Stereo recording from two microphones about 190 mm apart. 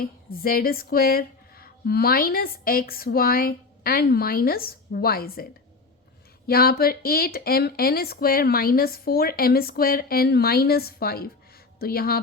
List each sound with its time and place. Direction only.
0.0 s speech: 50° left (ahead or behind)
6.5 s speech: 55° left (ahead or behind)